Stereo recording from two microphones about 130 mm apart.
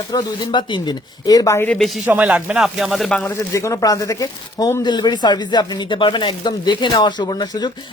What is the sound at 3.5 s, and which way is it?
Speech, 25° left (ahead or behind).